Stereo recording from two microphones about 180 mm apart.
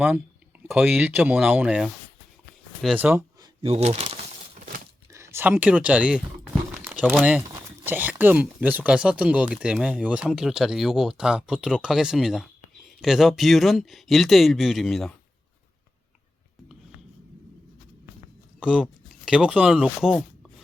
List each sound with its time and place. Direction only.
0.7 s speech: 5° right (ahead or behind)
3.0 s speech: 10° right (ahead or behind)
3.4 s a sound: 35° right (ahead or behind)
5.1 s speech: 15° right (ahead or behind)
6.7 s a sound: 10° right (ahead or behind)
7.4 s speech: 10° right (ahead or behind)
18.6 s speech: 5° right (ahead or behind)